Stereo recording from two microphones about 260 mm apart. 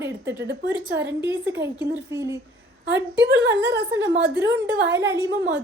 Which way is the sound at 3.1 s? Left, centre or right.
Right.